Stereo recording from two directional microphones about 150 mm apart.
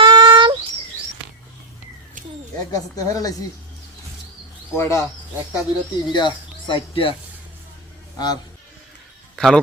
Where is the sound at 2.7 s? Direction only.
25° left (ahead or behind).